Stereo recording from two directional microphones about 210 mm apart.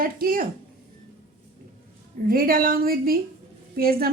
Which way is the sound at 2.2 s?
45° right (ahead or behind).